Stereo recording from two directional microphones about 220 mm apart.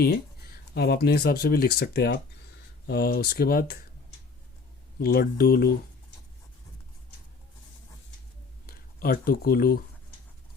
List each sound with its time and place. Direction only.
0.0 s speech: 45° left (ahead or behind)
4.9 s speech: 45° left (ahead or behind)
8.6 s speech: 40° left (ahead or behind)